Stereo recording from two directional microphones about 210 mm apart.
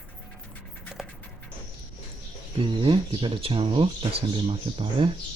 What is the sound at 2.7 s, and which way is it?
Speech, 25° right (ahead or behind).